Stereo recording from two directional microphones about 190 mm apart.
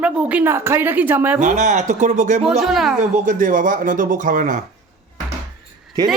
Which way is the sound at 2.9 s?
40° right (ahead or behind).